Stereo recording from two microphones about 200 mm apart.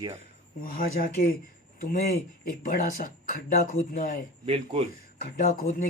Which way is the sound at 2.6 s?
40° left (ahead or behind).